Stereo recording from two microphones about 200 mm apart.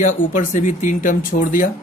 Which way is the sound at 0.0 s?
40° left (ahead or behind).